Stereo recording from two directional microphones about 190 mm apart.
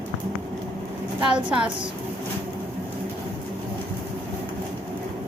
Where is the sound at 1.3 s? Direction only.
5° right (ahead or behind).